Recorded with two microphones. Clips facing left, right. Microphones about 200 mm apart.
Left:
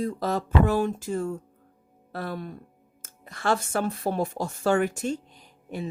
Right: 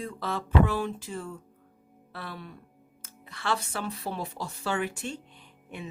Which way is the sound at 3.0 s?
45° left (ahead or behind).